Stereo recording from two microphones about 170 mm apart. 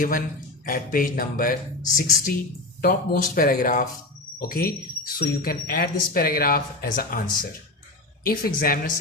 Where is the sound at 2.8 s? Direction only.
60° left (ahead or behind).